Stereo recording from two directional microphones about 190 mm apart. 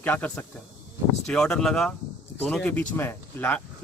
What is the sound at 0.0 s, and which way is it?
Speech, 10° left (ahead or behind).